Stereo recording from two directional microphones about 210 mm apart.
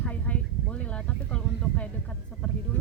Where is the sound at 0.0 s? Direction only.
5° left (ahead or behind).